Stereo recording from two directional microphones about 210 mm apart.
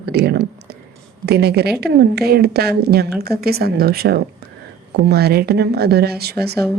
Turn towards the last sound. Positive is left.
turn(degrees=-50)  # may be behind; listen again after turning